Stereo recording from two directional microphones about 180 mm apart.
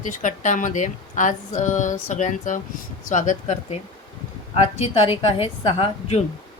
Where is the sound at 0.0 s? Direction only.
45° left (ahead or behind).